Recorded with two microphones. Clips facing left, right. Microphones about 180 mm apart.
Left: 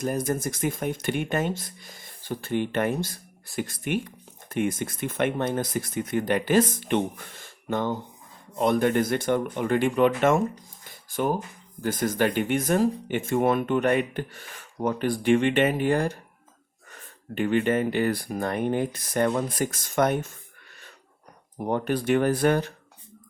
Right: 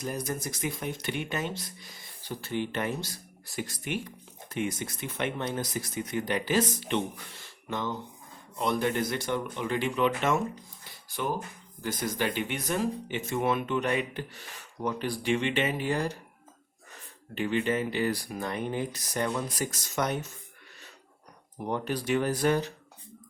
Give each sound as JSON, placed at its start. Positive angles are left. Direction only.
{"t": 0.0, "sound": "speech", "side_deg": 50}
{"t": 17.3, "sound": "speech", "side_deg": 55}
{"t": 21.6, "sound": "speech", "side_deg": 50}